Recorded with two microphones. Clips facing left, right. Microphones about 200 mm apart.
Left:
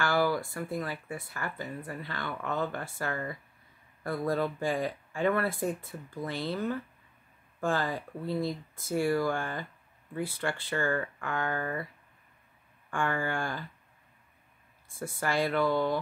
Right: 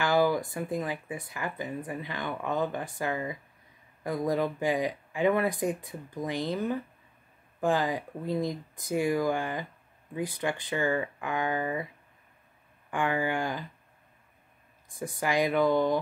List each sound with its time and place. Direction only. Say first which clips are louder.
0.0 s speech: right 3 dB; 20° right (ahead or behind)
12.9 s speech: right 3 dB; 15° right (ahead or behind)
14.9 s speech: right 2 dB; 15° right (ahead or behind)